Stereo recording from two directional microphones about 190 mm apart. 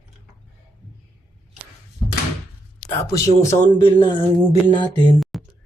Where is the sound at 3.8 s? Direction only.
25° left (ahead or behind).